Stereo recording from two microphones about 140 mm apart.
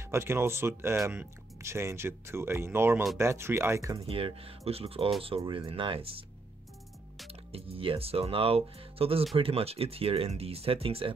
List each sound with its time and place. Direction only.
0.0 s speech: 20° right (ahead or behind)
4.0 s speech: 40° right (ahead or behind)
7.2 s speech: 45° right (ahead or behind)